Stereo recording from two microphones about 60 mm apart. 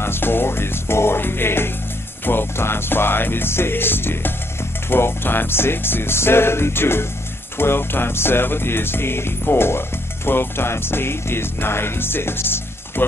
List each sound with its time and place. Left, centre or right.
0.0 s music: left